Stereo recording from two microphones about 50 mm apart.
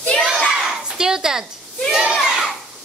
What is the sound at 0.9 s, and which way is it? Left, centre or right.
A woman's voice, centre.